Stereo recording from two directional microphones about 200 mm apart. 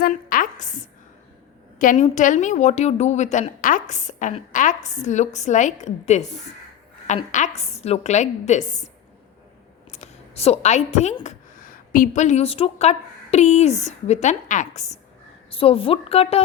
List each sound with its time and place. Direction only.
0.0 s a sound: 45° left (ahead or behind)
1.8 s a woman's voice: 40° left (ahead or behind)
7.3 s a woman's voice: 40° left (ahead or behind)
9.9 s a woman's voice: 30° left (ahead or behind)